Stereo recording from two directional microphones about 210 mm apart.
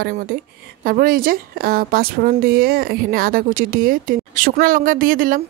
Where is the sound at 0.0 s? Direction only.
40° right (ahead or behind).